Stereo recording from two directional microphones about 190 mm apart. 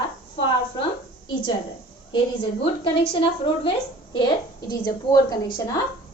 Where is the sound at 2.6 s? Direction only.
25° left (ahead or behind).